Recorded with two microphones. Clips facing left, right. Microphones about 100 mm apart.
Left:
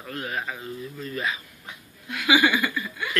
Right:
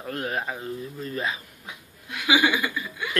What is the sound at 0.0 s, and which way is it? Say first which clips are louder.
Speech: right 2 dB; 40° right (ahead or behind).